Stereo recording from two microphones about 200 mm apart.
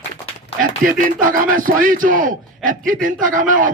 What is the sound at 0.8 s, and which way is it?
A man's voice, 40° right (ahead or behind).